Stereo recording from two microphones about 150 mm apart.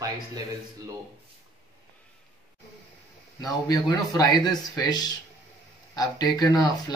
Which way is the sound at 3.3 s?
25° left (ahead or behind).